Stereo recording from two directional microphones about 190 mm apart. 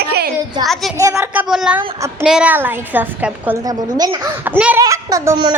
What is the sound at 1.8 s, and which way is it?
Speech, 15° right (ahead or behind).